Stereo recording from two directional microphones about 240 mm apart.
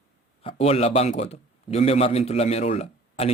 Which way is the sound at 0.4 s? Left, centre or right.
Left.